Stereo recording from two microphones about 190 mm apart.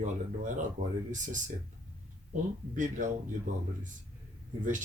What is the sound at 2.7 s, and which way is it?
Speech, 45° right (ahead or behind).